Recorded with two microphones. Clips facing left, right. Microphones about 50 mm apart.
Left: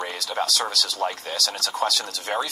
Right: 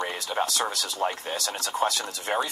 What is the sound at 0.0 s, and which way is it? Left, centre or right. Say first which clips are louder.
Speech: left 1 dB; right.